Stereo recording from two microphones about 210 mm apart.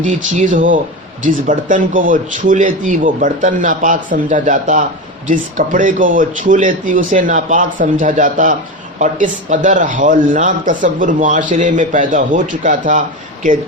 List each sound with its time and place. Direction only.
0.0 s a man's voice: 35° right (ahead or behind)